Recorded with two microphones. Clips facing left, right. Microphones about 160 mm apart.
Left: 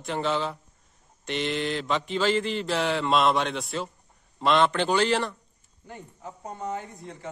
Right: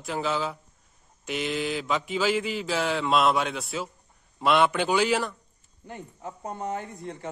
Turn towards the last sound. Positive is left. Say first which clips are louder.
# right 2 dB
turn(degrees=-50)  # may be behind; listen again after turning